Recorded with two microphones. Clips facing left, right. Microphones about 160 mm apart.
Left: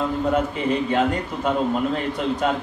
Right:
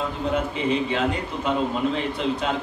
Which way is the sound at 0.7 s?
45° left (ahead or behind).